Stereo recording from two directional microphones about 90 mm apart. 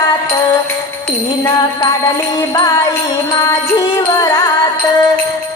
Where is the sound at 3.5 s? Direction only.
45° left (ahead or behind).